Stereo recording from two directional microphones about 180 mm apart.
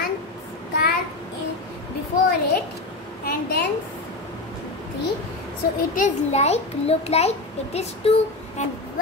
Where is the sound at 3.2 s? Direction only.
55° left (ahead or behind).